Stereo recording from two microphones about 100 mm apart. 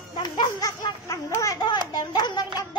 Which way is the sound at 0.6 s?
35° left (ahead or behind).